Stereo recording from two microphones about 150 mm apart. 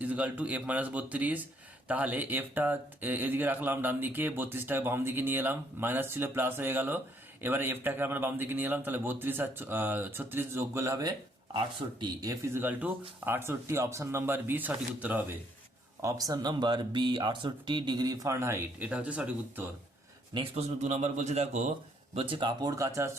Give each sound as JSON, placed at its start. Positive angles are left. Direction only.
{"t": 0.0, "sound": "speech", "side_deg": -10}
{"t": 16.0, "sound": "speech", "side_deg": -20}
{"t": 20.3, "sound": "a man's voice", "side_deg": -40}